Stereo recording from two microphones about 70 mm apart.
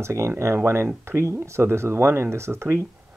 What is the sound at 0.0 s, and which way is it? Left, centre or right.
Speech, right.